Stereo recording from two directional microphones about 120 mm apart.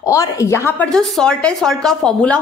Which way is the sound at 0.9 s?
5° left (ahead or behind).